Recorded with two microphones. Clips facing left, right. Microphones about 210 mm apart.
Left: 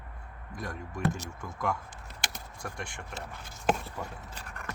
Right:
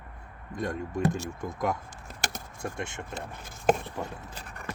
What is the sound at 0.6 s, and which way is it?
Speech, 20° right (ahead or behind).